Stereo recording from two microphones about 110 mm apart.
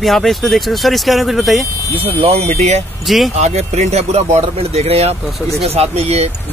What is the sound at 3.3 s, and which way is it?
Speech, 90° right.